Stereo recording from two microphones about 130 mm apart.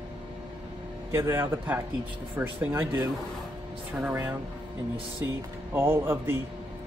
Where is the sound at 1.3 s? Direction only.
20° right (ahead or behind).